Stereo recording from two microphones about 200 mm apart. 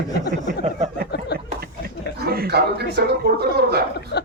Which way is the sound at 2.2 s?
50° right (ahead or behind).